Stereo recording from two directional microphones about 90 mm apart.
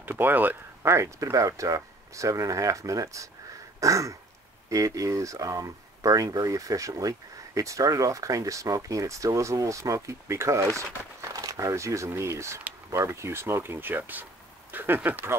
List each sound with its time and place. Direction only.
0.0 s speech: 20° right (ahead or behind)
14.7 s a sound: 20° right (ahead or behind)
15.0 s speech: 20° right (ahead or behind)